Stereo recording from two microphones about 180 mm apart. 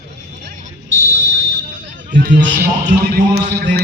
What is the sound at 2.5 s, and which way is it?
Speech, 50° right (ahead or behind).